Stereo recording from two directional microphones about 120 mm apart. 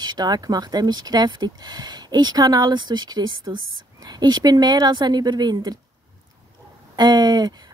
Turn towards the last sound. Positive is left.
turn(degrees=-35)  # may be behind; listen again after turning